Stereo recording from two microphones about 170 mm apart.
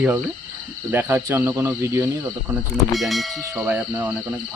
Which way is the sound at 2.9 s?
Centre (ahead or behind).